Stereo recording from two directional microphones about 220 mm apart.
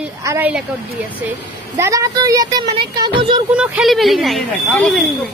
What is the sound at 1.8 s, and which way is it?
Speech, 15° right (ahead or behind).